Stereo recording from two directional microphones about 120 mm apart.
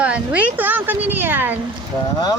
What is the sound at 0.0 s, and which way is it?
Speech, 10° right (ahead or behind).